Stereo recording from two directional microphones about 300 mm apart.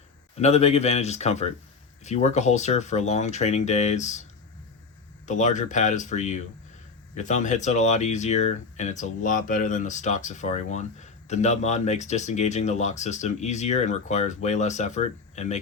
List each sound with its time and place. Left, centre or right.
0.3 s speech: left
5.2 s speech: left